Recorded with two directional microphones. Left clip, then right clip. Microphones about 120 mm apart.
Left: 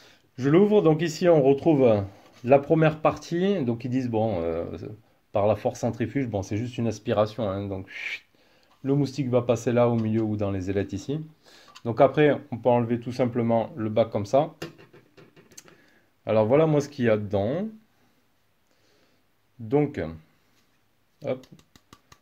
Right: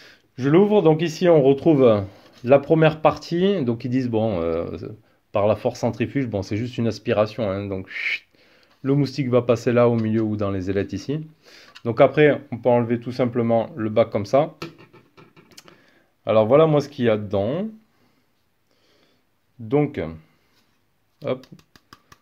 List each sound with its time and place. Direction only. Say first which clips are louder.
0.4 s speech: right 3 dB; 15° right (ahead or behind); by 4.1 s 30° right (ahead or behind)
4.1 s speech: right 3 dB; 40° right (ahead or behind)
4.7 s speech: right 4 dB; 25° right (ahead or behind)
19.7 s speech: right 3 dB; 20° right (ahead or behind)